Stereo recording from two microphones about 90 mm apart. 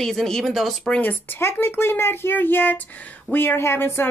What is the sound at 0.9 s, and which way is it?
Speech, 20° left (ahead or behind).